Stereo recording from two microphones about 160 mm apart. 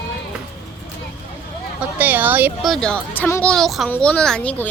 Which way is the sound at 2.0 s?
10° right (ahead or behind).